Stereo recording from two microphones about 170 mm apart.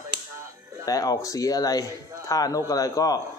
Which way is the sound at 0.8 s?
20° left (ahead or behind).